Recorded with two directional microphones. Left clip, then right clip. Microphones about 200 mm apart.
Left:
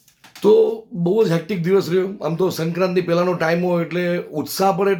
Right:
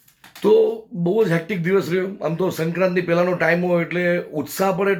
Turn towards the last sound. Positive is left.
turn(degrees=10)  # may be behind; listen again after turning